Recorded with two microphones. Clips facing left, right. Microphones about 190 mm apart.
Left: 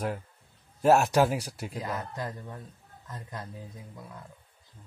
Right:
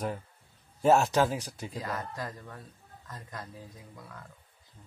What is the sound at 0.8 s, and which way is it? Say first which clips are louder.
Speech: left 2 dB; 10° left (ahead or behind).